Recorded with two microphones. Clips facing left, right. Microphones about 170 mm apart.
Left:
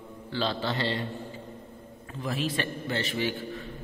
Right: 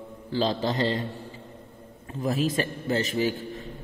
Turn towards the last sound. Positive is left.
turn(degrees=-40)  # may be behind; listen again after turning